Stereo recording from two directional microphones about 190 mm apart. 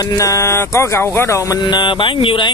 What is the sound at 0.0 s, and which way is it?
Speech, 20° left (ahead or behind).